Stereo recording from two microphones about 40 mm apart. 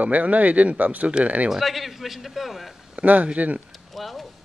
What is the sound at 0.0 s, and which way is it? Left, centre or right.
Speech, right.